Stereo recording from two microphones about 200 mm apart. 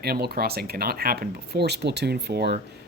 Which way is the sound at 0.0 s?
50° right (ahead or behind).